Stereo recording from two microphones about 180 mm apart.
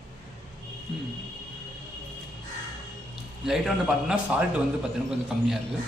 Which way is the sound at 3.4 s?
Centre (ahead or behind).